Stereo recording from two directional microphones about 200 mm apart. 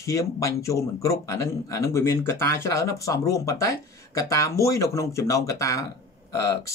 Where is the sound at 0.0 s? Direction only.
15° left (ahead or behind).